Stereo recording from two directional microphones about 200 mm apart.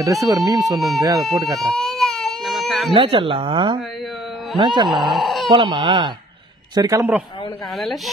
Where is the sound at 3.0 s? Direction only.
25° right (ahead or behind).